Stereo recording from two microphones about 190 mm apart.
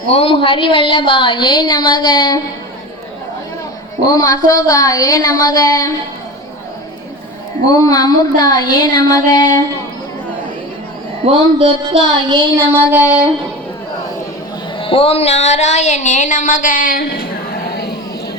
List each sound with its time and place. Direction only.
0.1 s a woman's voice: 30° left (ahead or behind)
4.0 s a woman's voice: 20° left (ahead or behind)
7.7 s a woman's voice: 20° left (ahead or behind)
11.3 s a sound: 30° right (ahead or behind)
12.7 s child singing: 10° right (ahead or behind)
14.8 s speech: 30° left (ahead or behind); by 17.9 s 55° left (ahead or behind)